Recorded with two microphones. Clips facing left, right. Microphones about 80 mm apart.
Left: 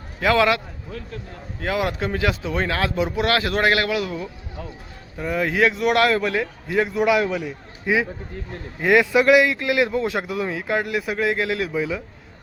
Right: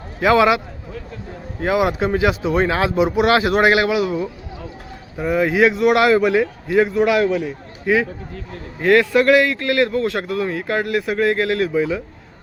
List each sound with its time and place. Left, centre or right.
0.2 s speech: centre
6.7 s a man's voice: centre
7.9 s speech: centre